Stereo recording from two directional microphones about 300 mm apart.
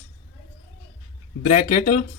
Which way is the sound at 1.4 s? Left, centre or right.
Left.